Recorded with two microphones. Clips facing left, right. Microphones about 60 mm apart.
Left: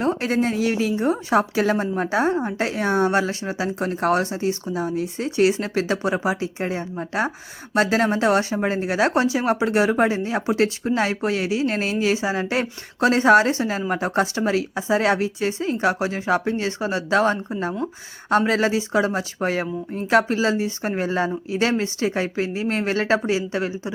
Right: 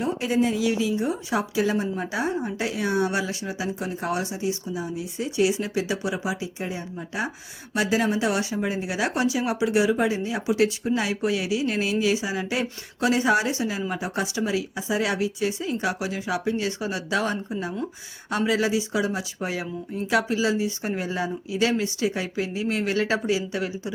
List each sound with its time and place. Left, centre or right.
0.0 s a woman's voice: left